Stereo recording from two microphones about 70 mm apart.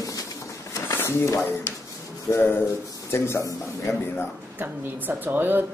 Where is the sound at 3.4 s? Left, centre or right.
Left.